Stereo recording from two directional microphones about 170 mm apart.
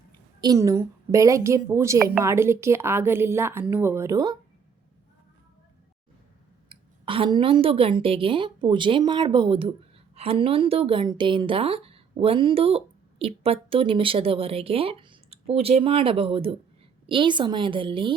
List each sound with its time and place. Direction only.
0.4 s a woman's voice: 20° right (ahead or behind)
6.7 s a woman's voice: 30° right (ahead or behind)